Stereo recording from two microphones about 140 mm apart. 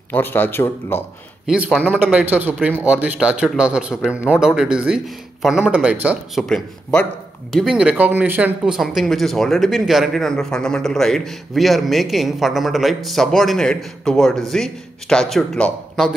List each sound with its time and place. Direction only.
0.1 s speech: 15° left (ahead or behind)
1.4 s a man's voice: 5° right (ahead or behind)
6.4 s speech: 5° left (ahead or behind)
7.5 s speech: 5° right (ahead or behind)